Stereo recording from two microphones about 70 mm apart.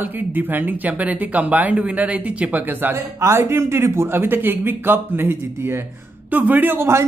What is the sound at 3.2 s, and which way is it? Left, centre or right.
Speech, right.